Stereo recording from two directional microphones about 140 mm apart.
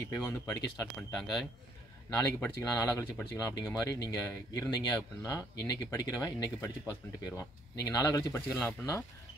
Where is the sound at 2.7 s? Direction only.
25° left (ahead or behind).